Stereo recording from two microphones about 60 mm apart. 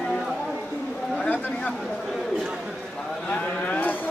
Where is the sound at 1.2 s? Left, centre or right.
Left.